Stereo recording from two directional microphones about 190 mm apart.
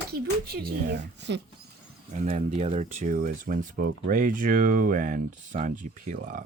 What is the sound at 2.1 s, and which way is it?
Speech, 40° right (ahead or behind).